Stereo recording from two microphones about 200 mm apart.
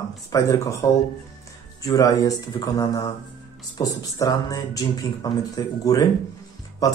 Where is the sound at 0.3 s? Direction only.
15° left (ahead or behind).